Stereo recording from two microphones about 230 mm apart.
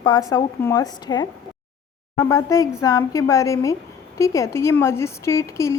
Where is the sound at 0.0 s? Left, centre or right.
Centre.